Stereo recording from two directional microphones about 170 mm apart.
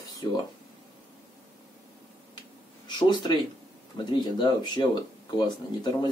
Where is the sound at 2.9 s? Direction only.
25° left (ahead or behind).